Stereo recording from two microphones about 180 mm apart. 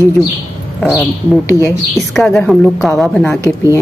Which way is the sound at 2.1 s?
Centre (ahead or behind).